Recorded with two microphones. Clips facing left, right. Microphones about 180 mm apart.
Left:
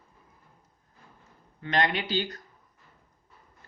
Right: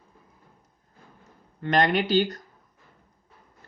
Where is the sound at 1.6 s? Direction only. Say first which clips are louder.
Right 5 dB; 45° right (ahead or behind).